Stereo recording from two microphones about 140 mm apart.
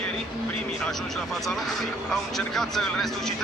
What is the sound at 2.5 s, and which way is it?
Speech, centre (ahead or behind).